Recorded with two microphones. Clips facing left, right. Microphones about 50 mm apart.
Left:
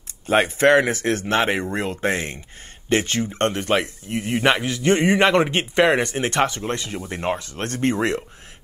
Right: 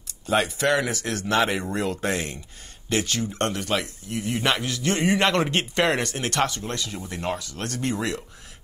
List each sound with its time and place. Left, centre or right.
0.3 s speech: left